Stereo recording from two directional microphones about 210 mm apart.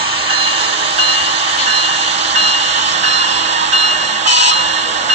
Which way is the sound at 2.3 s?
30° right (ahead or behind).